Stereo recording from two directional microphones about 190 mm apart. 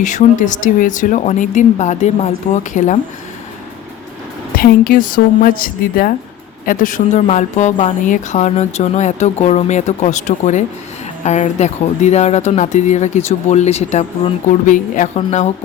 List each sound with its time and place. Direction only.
0.0 s a woman's voice: 40° left (ahead or behind)
4.5 s a woman's voice: 50° left (ahead or behind)